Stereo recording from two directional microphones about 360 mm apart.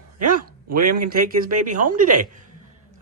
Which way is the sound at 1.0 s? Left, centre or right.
Right.